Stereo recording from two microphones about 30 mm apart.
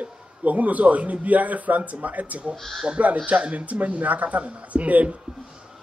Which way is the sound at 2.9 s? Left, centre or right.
Right.